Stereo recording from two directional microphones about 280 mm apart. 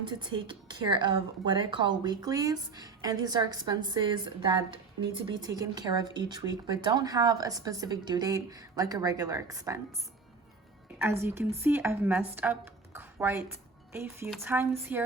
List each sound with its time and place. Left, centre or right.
0.0 s a woman's voice: centre
10.9 s a woman's voice: centre